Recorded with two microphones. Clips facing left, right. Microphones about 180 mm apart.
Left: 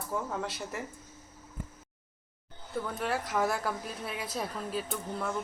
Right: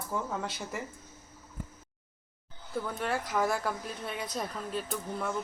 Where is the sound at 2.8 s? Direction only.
Centre (ahead or behind).